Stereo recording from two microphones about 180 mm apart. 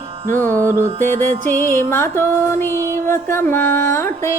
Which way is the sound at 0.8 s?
40° right (ahead or behind).